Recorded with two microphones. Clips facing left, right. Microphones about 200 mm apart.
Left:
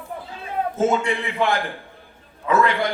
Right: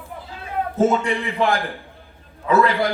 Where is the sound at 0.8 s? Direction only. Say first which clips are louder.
Right 3 dB; 40° right (ahead or behind).